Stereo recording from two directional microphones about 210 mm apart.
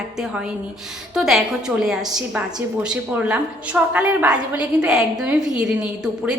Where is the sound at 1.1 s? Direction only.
Centre (ahead or behind).